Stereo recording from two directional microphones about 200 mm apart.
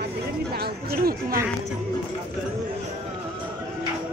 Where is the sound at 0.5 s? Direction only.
50° right (ahead or behind).